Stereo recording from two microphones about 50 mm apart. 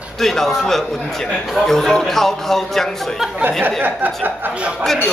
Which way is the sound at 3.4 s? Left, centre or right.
Right.